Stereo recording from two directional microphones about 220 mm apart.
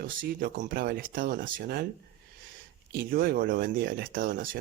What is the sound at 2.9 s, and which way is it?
Speech, 45° right (ahead or behind).